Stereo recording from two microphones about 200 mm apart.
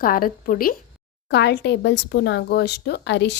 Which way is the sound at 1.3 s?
60° left (ahead or behind).